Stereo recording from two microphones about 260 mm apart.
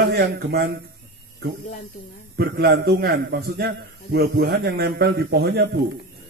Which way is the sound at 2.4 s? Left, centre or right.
Right.